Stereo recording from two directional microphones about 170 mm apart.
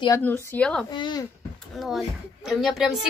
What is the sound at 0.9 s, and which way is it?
Speech, 25° left (ahead or behind).